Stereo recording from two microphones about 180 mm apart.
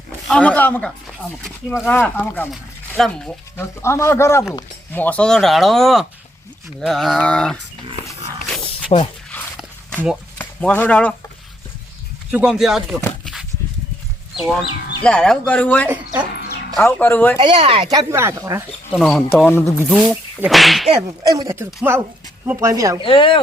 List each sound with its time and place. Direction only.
0.3 s speech: 10° left (ahead or behind)
3.8 s speech: 15° left (ahead or behind)
8.9 s speech: 35° left (ahead or behind)
9.6 s walk: 5° right (ahead or behind)
10.3 s speech: 10° left (ahead or behind)
12.3 s speech: 5° right (ahead or behind)
15.0 s speech: 5° left (ahead or behind)
17.4 s speech: 30° right (ahead or behind)
17.9 s speech: 15° right (ahead or behind)
18.9 s speech: 5° left (ahead or behind)
20.1 s speech: centre (ahead or behind)
21.2 s speech: 20° right (ahead or behind)
23.0 s speech: 30° left (ahead or behind)